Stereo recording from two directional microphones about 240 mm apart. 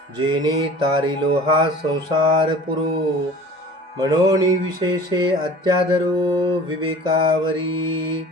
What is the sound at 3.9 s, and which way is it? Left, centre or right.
Speech, centre.